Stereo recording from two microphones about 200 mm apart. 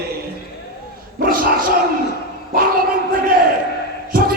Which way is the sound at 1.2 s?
45° right (ahead or behind).